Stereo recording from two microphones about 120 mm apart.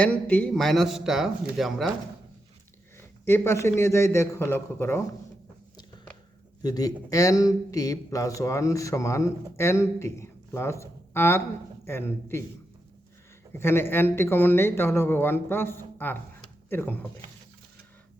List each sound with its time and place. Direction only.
0.0 s speech: 10° left (ahead or behind)
3.2 s speech: 20° left (ahead or behind)
6.6 s speech: 35° left (ahead or behind)
13.5 s speech: 20° left (ahead or behind)